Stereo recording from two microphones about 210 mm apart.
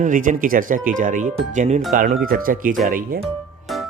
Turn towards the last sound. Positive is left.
turn(degrees=0)  # may be behind; listen again after turning